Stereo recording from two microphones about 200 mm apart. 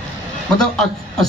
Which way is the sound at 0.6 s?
Centre (ahead or behind).